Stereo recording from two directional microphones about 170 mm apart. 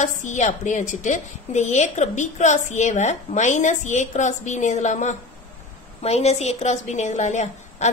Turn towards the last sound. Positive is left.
turn(degrees=45)  # may be behind; listen again after turning